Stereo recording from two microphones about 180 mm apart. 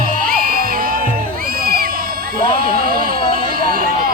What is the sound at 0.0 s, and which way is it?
Music, 55° right (ahead or behind).